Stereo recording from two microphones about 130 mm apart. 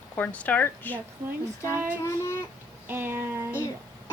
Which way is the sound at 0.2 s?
10° left (ahead or behind).